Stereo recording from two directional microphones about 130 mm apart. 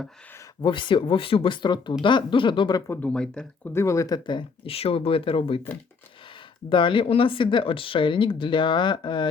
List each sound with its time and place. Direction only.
0.6 s speech: 40° left (ahead or behind)
3.0 s speech: 10° left (ahead or behind)
3.7 s speech: 20° left (ahead or behind); by 5.5 s 45° left (ahead or behind)
6.7 s speech: 40° left (ahead or behind)